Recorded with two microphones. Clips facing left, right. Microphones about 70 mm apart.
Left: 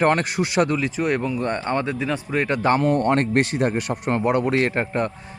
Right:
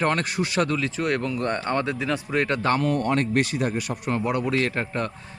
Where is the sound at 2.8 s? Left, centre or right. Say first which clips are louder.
Left 4 dB; left.